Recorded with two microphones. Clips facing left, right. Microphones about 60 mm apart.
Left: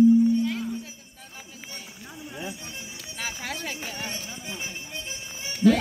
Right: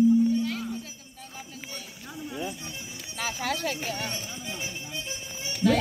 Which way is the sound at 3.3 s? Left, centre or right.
Centre.